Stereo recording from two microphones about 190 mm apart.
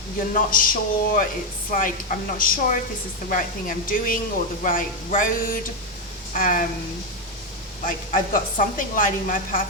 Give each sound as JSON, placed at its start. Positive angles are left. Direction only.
{"t": 0.3, "sound": "a woman's voice", "side_deg": 45}
{"t": 7.9, "sound": "a woman's voice", "side_deg": 45}